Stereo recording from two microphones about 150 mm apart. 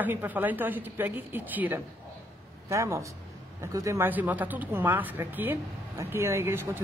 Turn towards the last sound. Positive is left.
turn(degrees=-15)  # may be behind; listen again after turning